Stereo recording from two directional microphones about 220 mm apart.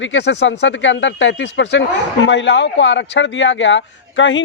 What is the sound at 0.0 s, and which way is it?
A man's voice, 55° left (ahead or behind).